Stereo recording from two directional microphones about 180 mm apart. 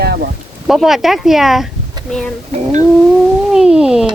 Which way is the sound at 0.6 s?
Centre (ahead or behind).